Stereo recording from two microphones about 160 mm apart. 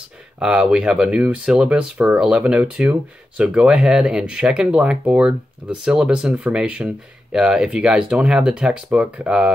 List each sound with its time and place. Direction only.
0.4 s speech: 5° right (ahead or behind)